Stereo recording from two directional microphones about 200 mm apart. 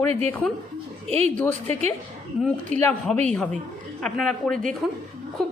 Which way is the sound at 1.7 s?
35° right (ahead or behind).